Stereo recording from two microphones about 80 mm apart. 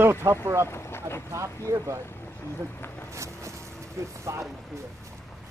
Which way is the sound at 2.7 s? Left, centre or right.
Left.